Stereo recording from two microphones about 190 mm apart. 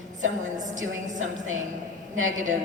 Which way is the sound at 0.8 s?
90° right.